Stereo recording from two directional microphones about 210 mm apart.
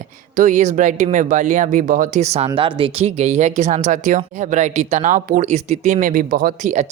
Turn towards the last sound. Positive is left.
turn(degrees=-35)  # may be behind; listen again after turning